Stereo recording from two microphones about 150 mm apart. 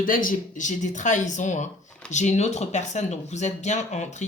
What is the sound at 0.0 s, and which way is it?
Speech, 65° left (ahead or behind).